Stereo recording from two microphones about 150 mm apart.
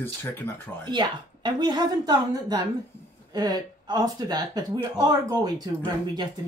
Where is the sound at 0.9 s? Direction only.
30° right (ahead or behind).